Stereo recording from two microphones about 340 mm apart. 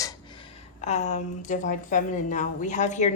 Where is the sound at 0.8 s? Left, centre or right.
Centre.